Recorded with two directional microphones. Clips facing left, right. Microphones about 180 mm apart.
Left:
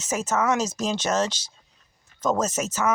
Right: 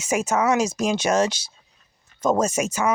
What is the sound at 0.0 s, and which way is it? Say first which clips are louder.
Speech: right 3 dB; 10° right (ahead or behind).